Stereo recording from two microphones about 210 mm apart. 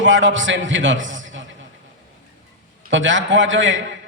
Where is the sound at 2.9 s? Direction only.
65° right (ahead or behind).